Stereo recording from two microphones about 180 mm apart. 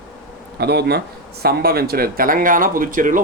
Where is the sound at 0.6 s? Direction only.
65° right (ahead or behind); by 3.2 s 50° right (ahead or behind).